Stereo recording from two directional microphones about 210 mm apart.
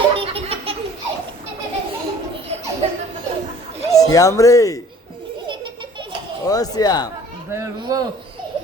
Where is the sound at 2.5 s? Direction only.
30° right (ahead or behind).